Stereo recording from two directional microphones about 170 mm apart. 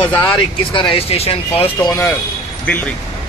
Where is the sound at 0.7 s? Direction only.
30° left (ahead or behind).